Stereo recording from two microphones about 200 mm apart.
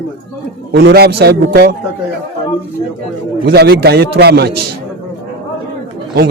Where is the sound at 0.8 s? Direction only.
55° right (ahead or behind).